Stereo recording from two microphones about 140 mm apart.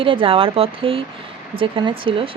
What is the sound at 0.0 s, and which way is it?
Speech, 40° right (ahead or behind).